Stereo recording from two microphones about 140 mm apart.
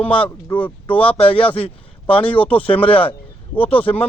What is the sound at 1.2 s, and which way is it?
Speech, 40° left (ahead or behind).